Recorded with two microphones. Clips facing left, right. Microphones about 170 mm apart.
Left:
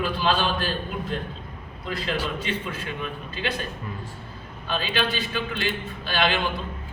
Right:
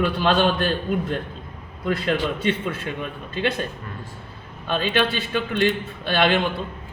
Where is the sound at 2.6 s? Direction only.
50° right (ahead or behind).